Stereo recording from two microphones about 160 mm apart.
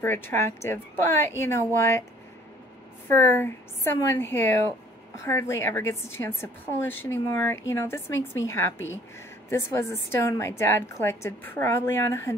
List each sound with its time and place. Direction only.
0.0 s a woman's voice: 15° left (ahead or behind)
3.1 s a woman's voice: 15° left (ahead or behind)